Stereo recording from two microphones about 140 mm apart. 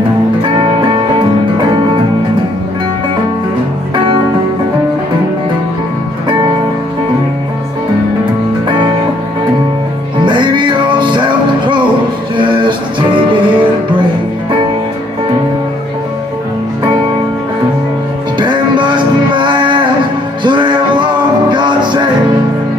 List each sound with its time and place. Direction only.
10.2 s music: 35° right (ahead or behind)
18.4 s music: 35° right (ahead or behind)